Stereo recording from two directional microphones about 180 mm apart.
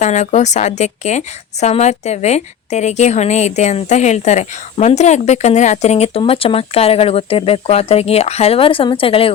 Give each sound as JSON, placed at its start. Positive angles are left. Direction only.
{"t": 0.0, "sound": "a woman's voice", "side_deg": 40}